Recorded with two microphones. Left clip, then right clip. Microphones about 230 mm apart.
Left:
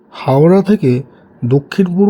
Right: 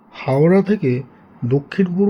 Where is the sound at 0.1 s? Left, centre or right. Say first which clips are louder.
Left 5 dB; centre.